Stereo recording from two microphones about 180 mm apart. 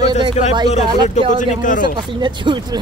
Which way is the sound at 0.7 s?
40° left (ahead or behind).